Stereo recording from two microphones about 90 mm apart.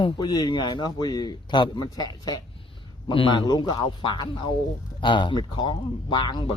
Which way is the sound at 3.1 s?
65° left (ahead or behind).